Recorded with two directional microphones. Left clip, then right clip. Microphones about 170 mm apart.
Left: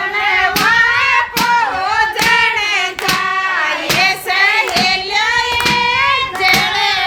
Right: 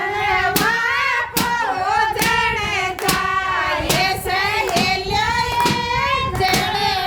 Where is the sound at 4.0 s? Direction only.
20° left (ahead or behind).